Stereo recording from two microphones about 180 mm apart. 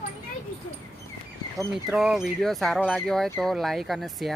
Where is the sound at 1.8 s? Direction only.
5° right (ahead or behind).